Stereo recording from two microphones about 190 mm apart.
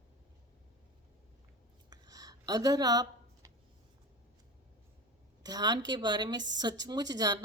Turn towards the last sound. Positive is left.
turn(degrees=-20)  # may be behind; listen again after turning